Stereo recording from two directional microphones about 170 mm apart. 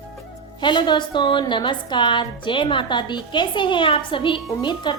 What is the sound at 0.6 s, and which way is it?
A woman's voice, 25° left (ahead or behind).